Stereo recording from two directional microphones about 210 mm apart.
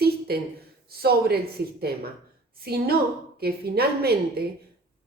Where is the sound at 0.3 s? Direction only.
50° right (ahead or behind).